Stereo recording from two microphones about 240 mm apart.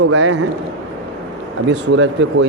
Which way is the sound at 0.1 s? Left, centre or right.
Right.